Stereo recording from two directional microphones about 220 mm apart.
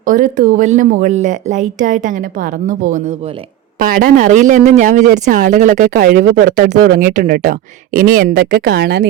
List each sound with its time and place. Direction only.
0.0 s speech: 35° right (ahead or behind)